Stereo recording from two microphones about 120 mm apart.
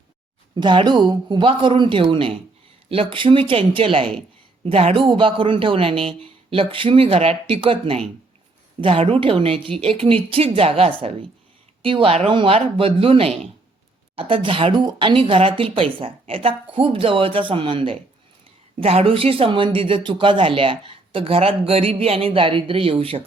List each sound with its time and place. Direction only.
0.5 s speech: 40° right (ahead or behind)
5.0 s speech: 40° right (ahead or behind)